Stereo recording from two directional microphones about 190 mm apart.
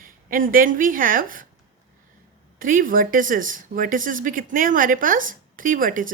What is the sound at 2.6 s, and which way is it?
Speech, 45° right (ahead or behind).